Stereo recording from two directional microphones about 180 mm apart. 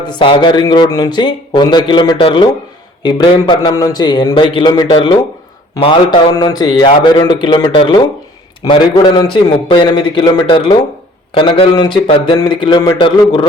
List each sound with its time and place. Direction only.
0.1 s speech: 25° left (ahead or behind)